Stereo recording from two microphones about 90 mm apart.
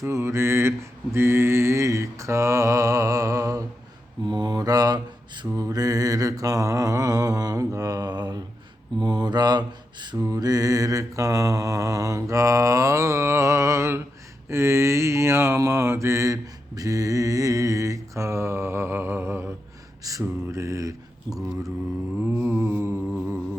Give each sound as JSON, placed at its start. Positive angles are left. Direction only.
{"t": 0.0, "sound": "mantra", "side_deg": -35}
{"t": 4.3, "sound": "mantra", "side_deg": -55}
{"t": 22.2, "sound": "mantra", "side_deg": -20}
{"t": 23.1, "sound": "a sound", "side_deg": -25}